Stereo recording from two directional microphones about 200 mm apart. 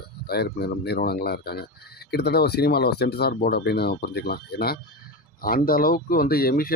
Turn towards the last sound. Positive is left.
turn(degrees=50)  # may be behind; listen again after turning